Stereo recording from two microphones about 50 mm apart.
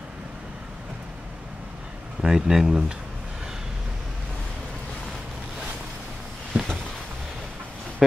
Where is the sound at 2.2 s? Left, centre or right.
Centre.